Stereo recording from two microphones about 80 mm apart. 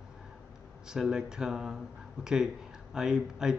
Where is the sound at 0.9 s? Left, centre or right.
Centre.